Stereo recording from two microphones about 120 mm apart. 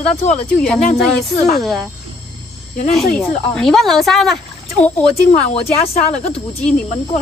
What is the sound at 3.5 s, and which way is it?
Speech, 5° left (ahead or behind).